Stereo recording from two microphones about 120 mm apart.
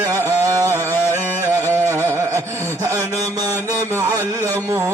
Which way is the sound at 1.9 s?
20° right (ahead or behind).